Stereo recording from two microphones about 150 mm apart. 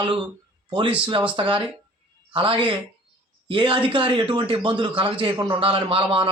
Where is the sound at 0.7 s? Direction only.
35° right (ahead or behind).